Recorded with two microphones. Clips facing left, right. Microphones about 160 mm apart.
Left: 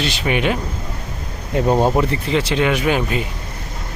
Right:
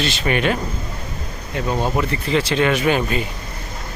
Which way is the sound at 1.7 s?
40° left (ahead or behind).